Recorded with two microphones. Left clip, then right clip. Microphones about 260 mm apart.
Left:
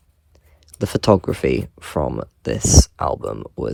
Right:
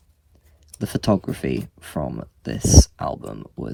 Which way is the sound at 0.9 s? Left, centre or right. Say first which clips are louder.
Left 6 dB; left.